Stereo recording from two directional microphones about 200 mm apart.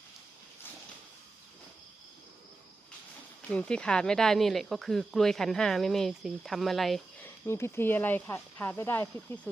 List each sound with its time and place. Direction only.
3.5 s speech: 5° left (ahead or behind)
7.4 s speech: 15° left (ahead or behind)